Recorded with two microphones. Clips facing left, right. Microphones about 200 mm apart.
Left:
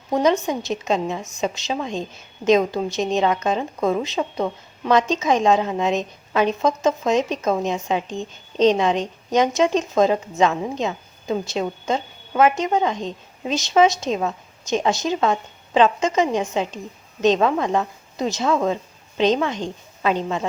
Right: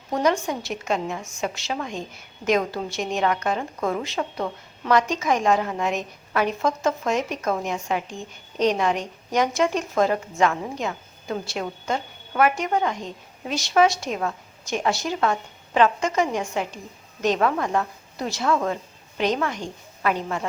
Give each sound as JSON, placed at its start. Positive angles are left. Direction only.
{"t": 0.1, "sound": "a woman's voice", "side_deg": 20}